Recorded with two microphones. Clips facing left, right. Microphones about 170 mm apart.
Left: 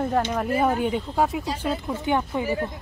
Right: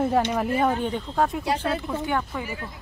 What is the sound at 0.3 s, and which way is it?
Speech, centre (ahead or behind).